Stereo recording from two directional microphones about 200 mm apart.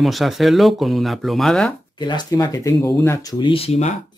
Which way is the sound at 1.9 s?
20° left (ahead or behind).